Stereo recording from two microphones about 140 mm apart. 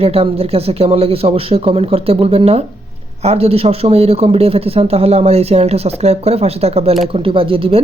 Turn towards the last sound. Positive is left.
turn(degrees=-40)  # may be behind; listen again after turning